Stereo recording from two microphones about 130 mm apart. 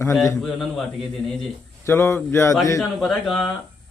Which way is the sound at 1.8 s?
20° left (ahead or behind).